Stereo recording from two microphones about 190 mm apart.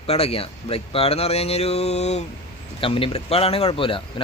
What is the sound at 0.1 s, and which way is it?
Speech, 30° left (ahead or behind).